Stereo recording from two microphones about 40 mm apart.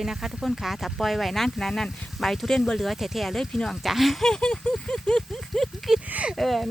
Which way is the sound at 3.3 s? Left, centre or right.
Centre.